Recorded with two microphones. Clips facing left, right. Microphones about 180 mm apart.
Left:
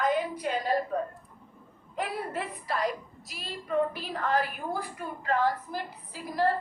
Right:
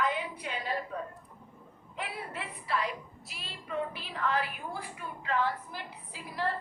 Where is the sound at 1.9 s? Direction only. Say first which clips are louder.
Left 7 dB; 40° left (ahead or behind).